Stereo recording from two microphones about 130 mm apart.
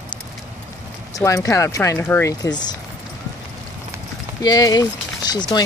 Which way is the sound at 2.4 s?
30° left (ahead or behind).